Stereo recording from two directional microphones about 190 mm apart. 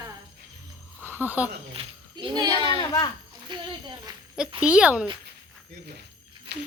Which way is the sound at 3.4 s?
25° right (ahead or behind).